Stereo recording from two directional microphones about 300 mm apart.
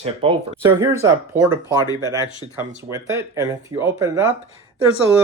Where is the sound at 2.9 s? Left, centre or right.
Centre.